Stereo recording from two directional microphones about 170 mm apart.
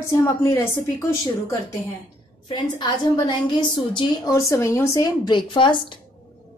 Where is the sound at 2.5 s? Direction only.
25° left (ahead or behind).